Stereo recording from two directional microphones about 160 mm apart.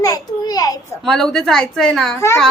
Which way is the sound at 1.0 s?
Centre (ahead or behind).